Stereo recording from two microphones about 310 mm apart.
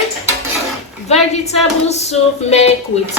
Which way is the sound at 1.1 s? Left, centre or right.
Left.